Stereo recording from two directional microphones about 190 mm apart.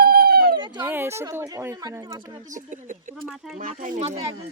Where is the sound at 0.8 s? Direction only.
10° right (ahead or behind).